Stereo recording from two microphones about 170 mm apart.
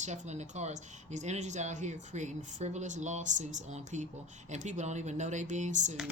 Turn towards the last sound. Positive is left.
turn(degrees=-45)  # may be behind; listen again after turning